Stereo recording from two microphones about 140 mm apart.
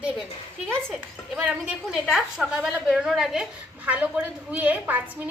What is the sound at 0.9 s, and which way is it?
A woman's voice, 5° right (ahead or behind).